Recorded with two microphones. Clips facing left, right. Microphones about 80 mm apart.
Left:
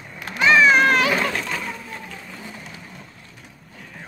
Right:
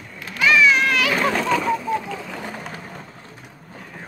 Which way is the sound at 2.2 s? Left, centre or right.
Right.